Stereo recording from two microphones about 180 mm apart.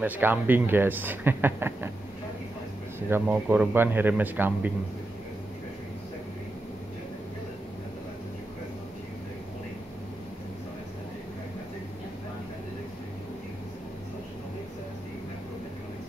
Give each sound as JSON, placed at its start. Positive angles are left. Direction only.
{"t": 0.0, "sound": "speech", "side_deg": -10}
{"t": 3.1, "sound": "speech", "side_deg": -10}